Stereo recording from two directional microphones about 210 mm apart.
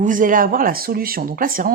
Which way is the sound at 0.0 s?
40° right (ahead or behind).